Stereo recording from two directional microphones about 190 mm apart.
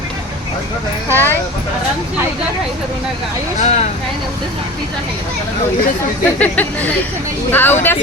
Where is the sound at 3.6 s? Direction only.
35° left (ahead or behind).